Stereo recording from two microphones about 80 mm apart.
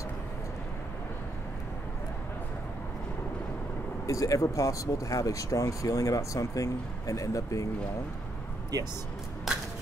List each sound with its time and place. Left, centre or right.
4.0 s speech: left
8.7 s speech: right
9.5 s a sound: centre